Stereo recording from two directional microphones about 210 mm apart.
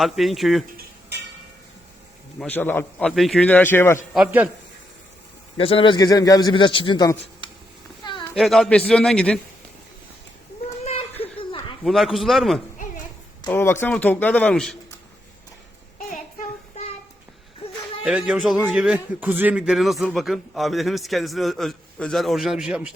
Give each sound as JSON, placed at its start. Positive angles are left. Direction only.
{"t": 0.0, "sound": "a man's voice", "side_deg": 0}
{"t": 2.4, "sound": "a man's voice", "side_deg": 10}
{"t": 4.1, "sound": "a man's voice", "side_deg": -5}
{"t": 5.5, "sound": "a man's voice", "side_deg": 25}
{"t": 8.0, "sound": "a sound", "side_deg": 20}
{"t": 8.4, "sound": "a man's voice", "side_deg": 0}
{"t": 11.2, "sound": "laughter", "side_deg": 25}
{"t": 11.8, "sound": "a man's voice", "side_deg": 0}
{"t": 13.4, "sound": "a man's voice", "side_deg": 10}
{"t": 18.0, "sound": "a man's voice", "side_deg": -5}